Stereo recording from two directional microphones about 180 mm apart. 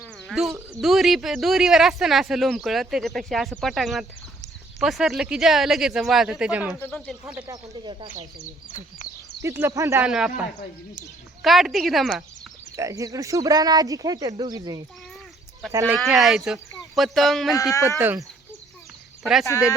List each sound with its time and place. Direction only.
0.3 s speech: centre (ahead or behind)
6.7 s speech: 10° left (ahead or behind)
7.4 s speech: 20° right (ahead or behind)
9.4 s speech: 15° right (ahead or behind)
10.0 s speech: 5° right (ahead or behind)
11.4 s speech: centre (ahead or behind)
12.7 s speech: 15° right (ahead or behind)
16.0 s speech: centre (ahead or behind)
17.5 s speech: 20° left (ahead or behind)
19.2 s speech: centre (ahead or behind)